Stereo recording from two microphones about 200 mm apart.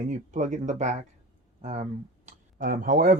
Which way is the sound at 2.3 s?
45° right (ahead or behind).